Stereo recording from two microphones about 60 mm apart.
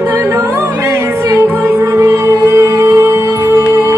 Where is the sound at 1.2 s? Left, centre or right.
Right.